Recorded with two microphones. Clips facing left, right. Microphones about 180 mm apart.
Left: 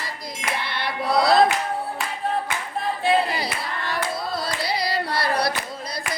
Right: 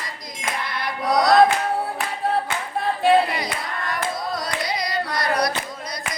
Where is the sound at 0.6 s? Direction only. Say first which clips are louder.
Right 3 dB; 30° left (ahead or behind).